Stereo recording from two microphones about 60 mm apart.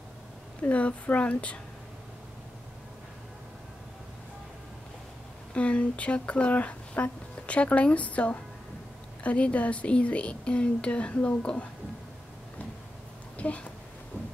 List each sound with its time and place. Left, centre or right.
0.6 s speech: left
5.5 s speech: centre
13.4 s speech: left